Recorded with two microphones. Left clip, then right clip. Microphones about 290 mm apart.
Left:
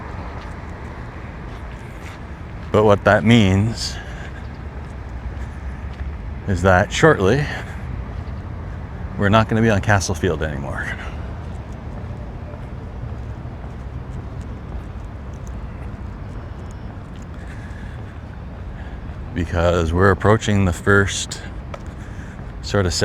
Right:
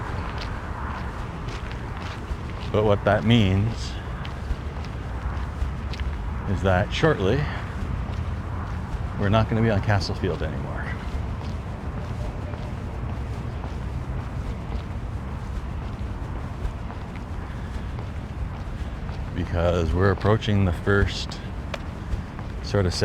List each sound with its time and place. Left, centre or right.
2.7 s speech: left
6.5 s speech: left
9.2 s speech: left
19.4 s speech: left
22.7 s speech: centre